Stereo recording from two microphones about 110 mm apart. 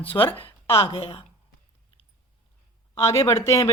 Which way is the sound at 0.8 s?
65° left (ahead or behind).